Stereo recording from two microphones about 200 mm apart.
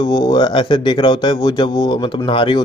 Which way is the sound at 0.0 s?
20° left (ahead or behind).